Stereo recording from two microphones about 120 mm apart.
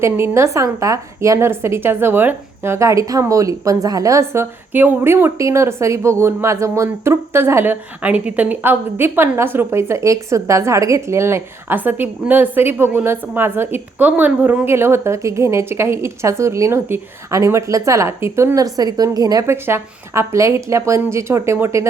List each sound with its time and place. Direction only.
0.0 s a woman's voice: 25° right (ahead or behind)